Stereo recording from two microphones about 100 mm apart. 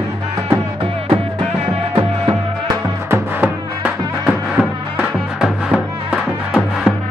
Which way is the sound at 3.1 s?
15° right (ahead or behind).